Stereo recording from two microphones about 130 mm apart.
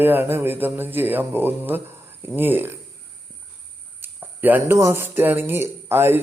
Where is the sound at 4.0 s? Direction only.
15° right (ahead or behind).